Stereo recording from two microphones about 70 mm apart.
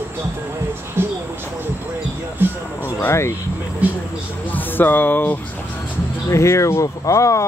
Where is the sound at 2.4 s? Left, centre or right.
Right.